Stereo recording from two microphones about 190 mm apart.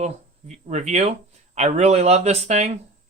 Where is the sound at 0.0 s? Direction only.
35° right (ahead or behind).